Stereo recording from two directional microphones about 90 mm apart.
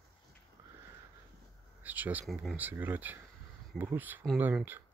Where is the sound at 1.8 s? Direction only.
20° right (ahead or behind).